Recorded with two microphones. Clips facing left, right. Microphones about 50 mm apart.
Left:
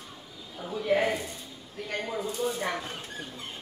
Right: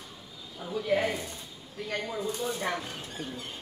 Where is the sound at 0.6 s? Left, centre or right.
Centre.